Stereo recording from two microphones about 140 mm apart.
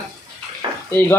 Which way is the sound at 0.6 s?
30° right (ahead or behind).